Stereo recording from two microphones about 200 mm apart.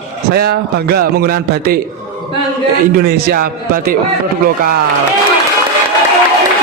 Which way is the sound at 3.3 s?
50° right (ahead or behind).